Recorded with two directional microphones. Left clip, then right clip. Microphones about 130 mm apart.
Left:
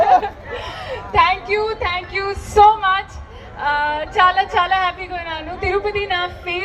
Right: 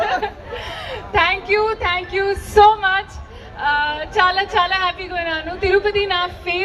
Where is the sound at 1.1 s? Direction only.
35° right (ahead or behind).